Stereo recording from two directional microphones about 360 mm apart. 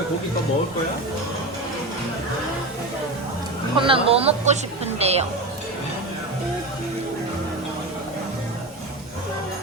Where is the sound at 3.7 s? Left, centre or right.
Centre.